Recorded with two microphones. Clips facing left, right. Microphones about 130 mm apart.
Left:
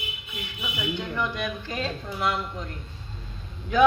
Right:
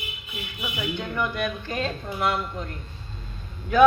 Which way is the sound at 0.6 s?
50° right (ahead or behind).